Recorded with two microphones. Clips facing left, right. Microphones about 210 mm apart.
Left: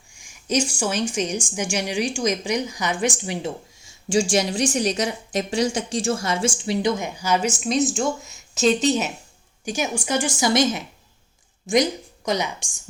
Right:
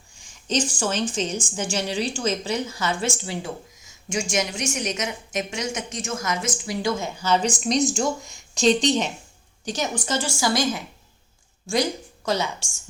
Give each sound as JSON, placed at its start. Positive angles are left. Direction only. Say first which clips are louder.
{"t": 0.1, "sound": "a woman's voice", "louder": "left 2 dB", "side_deg": 10}
{"t": 3.8, "sound": "a woman's voice", "louder": "left 9 dB", "side_deg": 30}